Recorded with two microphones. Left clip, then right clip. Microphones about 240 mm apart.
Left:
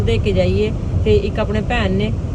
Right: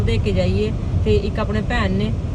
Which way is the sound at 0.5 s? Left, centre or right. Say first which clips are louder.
Left 3 dB; left.